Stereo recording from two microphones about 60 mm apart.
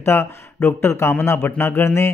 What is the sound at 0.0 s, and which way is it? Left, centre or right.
Speech, left.